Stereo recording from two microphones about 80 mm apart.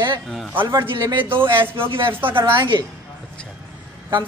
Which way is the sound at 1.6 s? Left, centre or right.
Right.